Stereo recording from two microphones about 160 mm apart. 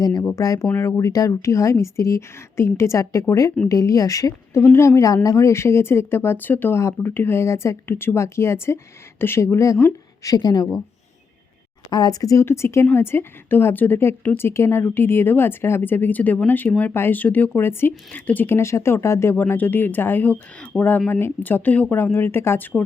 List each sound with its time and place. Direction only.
0.0 s a woman's voice: 25° left (ahead or behind)
11.9 s a woman's voice: 25° left (ahead or behind)